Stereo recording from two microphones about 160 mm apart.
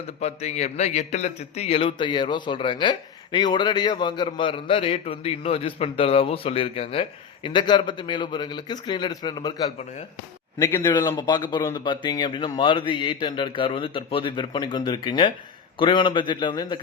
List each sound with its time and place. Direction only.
0.2 s a man's voice: 45° left (ahead or behind); by 10.9 s 15° left (ahead or behind)
11.2 s speech: 25° left (ahead or behind)